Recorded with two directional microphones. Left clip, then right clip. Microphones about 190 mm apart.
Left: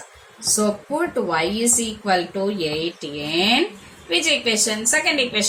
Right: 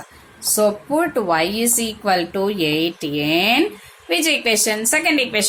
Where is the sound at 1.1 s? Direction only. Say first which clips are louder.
Right 3 dB; 40° right (ahead or behind).